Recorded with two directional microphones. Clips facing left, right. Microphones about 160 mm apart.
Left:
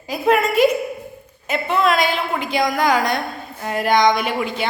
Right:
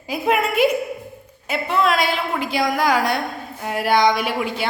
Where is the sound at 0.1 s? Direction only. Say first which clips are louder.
Left 3 dB; 10° right (ahead or behind).